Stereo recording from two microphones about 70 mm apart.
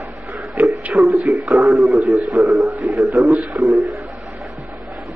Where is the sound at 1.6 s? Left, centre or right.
Right.